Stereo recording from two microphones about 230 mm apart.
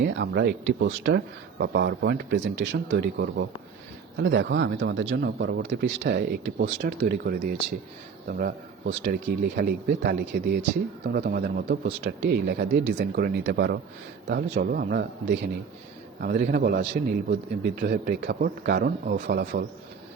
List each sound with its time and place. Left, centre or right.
0.0 s a man's voice: right